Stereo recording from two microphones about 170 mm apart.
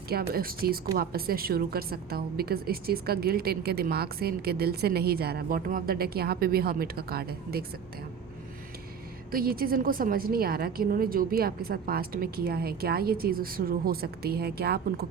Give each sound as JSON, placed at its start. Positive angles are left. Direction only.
{"t": 0.1, "sound": "a woman's voice", "side_deg": -60}
{"t": 9.3, "sound": "a woman's voice", "side_deg": -60}